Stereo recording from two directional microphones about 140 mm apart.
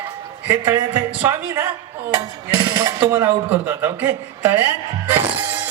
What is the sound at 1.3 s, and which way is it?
Speech, 20° right (ahead or behind).